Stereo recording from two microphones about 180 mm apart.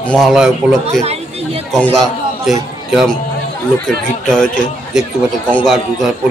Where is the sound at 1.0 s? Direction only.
35° right (ahead or behind).